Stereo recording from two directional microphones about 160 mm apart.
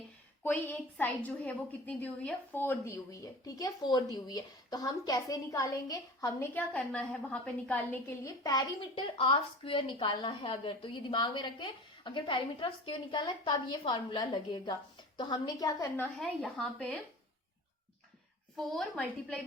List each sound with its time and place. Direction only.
0.4 s a woman's voice: 10° left (ahead or behind)
8.4 s a woman's voice: 25° left (ahead or behind)
16.2 s a woman's voice: 5° left (ahead or behind)
18.5 s a woman's voice: 5° left (ahead or behind)